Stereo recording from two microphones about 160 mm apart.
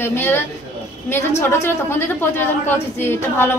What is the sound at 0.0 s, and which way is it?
A woman's voice, 15° left (ahead or behind).